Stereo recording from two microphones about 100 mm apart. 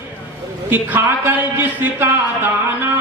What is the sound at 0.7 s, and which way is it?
Speech, 20° right (ahead or behind).